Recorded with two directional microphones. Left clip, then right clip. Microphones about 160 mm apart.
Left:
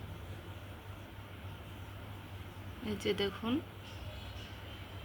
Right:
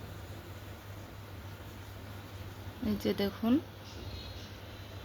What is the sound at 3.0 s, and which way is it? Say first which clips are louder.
Speech: right 2 dB; 45° right (ahead or behind).